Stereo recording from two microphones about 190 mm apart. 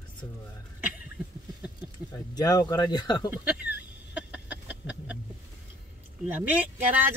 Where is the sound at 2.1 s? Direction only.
20° left (ahead or behind).